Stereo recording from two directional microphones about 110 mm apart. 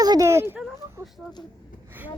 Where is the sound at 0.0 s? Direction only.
35° right (ahead or behind).